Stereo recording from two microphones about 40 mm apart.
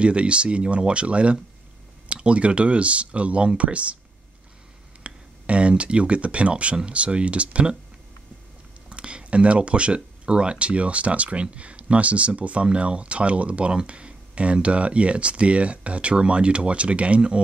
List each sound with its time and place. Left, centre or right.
0.0 s speech: right
5.0 s speech: right
8.8 s speech: right